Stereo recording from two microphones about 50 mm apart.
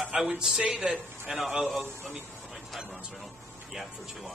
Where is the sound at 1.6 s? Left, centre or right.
Centre.